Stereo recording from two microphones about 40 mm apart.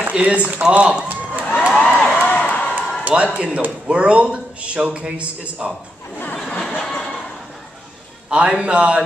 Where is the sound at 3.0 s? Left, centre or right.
Right.